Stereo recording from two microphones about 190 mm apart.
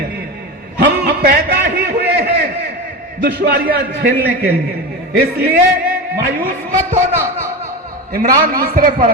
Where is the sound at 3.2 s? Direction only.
60° right (ahead or behind).